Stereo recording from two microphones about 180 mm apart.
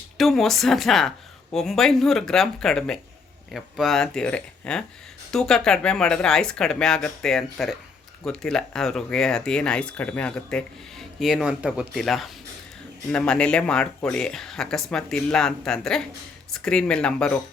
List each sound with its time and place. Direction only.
0.2 s speech: centre (ahead or behind)